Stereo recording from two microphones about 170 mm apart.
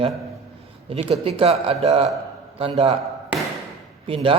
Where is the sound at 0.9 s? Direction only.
35° right (ahead or behind).